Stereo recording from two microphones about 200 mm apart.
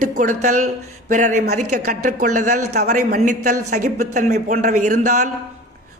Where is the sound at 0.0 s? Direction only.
40° right (ahead or behind).